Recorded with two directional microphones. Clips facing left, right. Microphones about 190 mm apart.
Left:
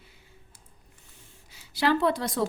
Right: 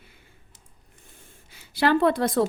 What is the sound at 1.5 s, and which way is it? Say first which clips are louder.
Speech: right 3 dB; 55° right (ahead or behind).